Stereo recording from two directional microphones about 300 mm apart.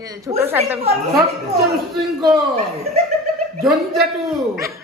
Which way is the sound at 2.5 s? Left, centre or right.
Right.